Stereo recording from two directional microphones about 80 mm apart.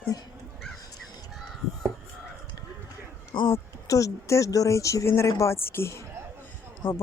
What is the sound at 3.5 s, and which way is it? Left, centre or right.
Speech, left.